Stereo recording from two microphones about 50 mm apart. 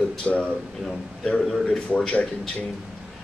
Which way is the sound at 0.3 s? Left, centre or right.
Left.